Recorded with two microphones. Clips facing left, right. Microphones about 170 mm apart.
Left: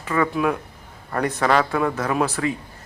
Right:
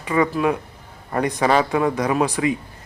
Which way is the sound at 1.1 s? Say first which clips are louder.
Right 1 dB; 15° right (ahead or behind).